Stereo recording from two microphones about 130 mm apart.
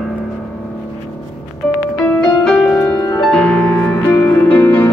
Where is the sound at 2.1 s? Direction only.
5° left (ahead or behind).